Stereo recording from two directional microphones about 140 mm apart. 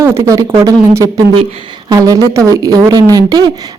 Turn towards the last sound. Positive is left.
turn(degrees=-30)  # may be behind; listen again after turning